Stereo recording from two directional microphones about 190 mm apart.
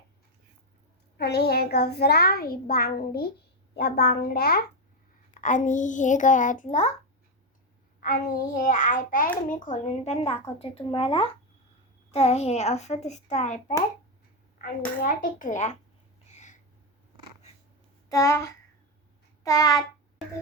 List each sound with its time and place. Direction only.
1.2 s a child's voice: 55° left (ahead or behind)
5.3 s a child's voice: 45° left (ahead or behind)
8.0 s a child's voice: 45° left (ahead or behind)
15.0 s a child's voice: 45° left (ahead or behind)
16.3 s a sound: 40° left (ahead or behind)
18.1 s speech: 15° left (ahead or behind)
19.4 s a sound: 20° left (ahead or behind)